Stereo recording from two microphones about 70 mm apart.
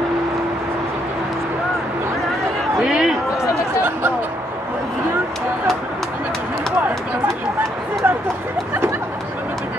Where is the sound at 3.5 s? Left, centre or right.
Right.